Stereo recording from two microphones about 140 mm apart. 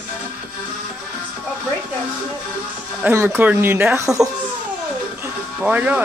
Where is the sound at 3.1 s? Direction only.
15° right (ahead or behind).